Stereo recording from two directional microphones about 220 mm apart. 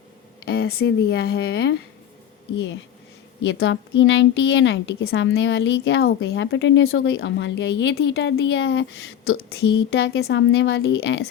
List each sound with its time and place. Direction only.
0.4 s a sound: 45° left (ahead or behind)
0.8 s speech: 50° left (ahead or behind)
3.4 s a woman's voice: 55° left (ahead or behind)